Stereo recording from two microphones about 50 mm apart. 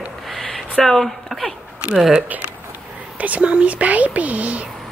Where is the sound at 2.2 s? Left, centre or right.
Right.